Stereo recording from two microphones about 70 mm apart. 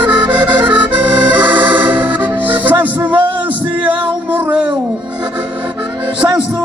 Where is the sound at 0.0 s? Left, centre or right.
Right.